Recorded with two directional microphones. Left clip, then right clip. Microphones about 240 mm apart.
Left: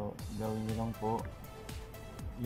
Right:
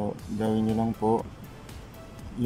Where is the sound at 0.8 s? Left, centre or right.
Centre.